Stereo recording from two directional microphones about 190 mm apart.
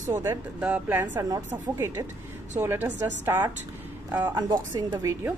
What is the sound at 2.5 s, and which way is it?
A woman's voice, 10° right (ahead or behind).